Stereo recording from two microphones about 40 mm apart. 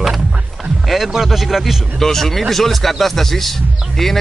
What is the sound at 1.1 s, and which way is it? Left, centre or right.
Speech, centre.